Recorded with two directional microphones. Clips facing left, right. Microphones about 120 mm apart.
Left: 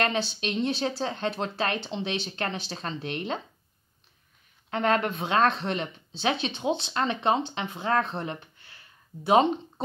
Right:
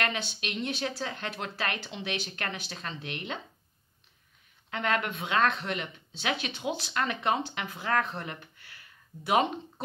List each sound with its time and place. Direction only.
0.0 s speech: 30° left (ahead or behind)
4.6 s speech: 35° left (ahead or behind)